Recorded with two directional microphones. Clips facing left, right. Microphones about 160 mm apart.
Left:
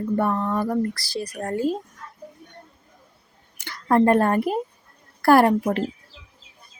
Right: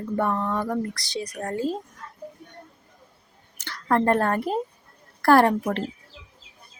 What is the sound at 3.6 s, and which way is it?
A woman's voice, 10° left (ahead or behind).